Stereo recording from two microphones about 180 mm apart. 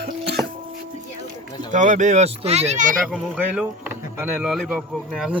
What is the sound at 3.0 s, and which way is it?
Speech, centre (ahead or behind).